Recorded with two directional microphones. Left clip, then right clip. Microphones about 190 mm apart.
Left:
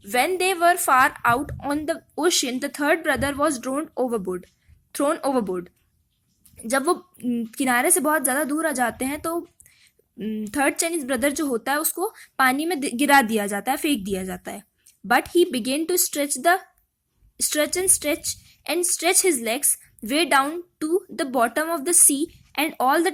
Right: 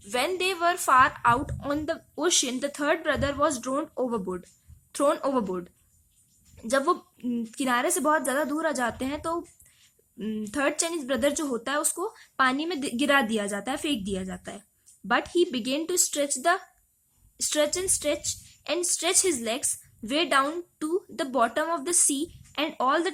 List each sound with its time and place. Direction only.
0.1 s a woman's voice: 15° left (ahead or behind)